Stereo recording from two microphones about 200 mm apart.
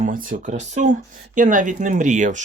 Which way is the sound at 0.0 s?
45° right (ahead or behind).